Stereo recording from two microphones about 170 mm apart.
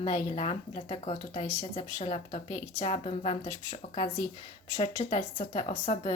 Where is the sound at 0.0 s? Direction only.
30° left (ahead or behind).